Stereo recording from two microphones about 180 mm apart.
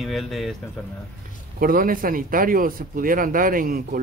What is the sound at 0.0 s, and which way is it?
Speech, centre (ahead or behind).